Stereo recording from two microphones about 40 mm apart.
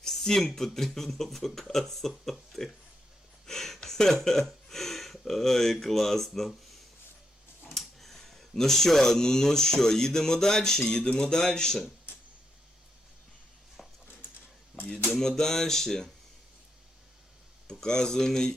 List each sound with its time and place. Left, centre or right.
0.0 s a sound: centre
0.3 s speech: centre
3.4 s a sound: centre
5.8 s speech: centre
7.8 s speech: centre
10.8 s a sound: centre
11.2 s speech: centre
15.1 s speech: centre
17.7 s speech: centre